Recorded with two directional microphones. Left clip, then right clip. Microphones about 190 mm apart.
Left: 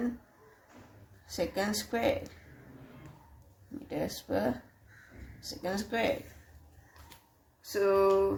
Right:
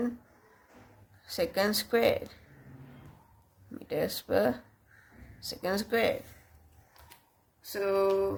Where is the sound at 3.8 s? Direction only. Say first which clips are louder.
Right 4 dB; 30° right (ahead or behind).